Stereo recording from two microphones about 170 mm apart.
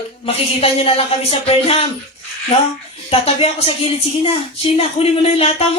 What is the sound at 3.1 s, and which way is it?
A woman's voice, 35° left (ahead or behind).